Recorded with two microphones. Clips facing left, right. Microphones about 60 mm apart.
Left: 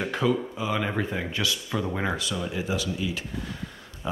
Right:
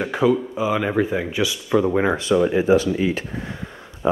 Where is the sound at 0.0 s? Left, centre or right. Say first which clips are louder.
Right 6 dB; centre.